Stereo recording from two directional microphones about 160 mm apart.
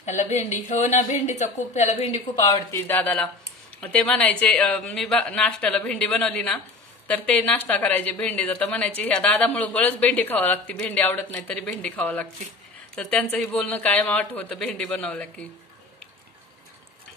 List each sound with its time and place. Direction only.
0.0 s a woman's voice: 45° left (ahead or behind)
2.4 s a woman's voice: 20° left (ahead or behind)